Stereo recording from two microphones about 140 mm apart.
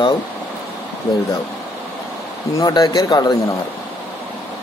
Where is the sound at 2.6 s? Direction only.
30° left (ahead or behind).